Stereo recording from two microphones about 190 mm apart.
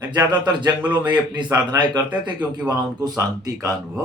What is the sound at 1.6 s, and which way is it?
Speech, 25° right (ahead or behind).